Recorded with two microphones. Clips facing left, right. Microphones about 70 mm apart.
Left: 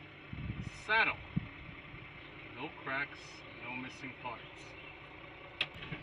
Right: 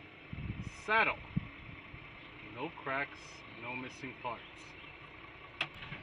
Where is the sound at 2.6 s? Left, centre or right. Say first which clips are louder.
Right 2 dB; centre.